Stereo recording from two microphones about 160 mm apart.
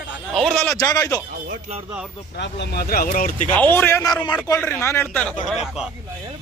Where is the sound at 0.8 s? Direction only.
25° left (ahead or behind).